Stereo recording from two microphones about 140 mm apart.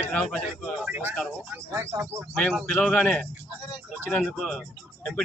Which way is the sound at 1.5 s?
20° right (ahead or behind).